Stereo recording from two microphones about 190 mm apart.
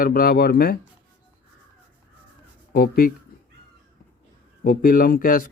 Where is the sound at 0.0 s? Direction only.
50° left (ahead or behind).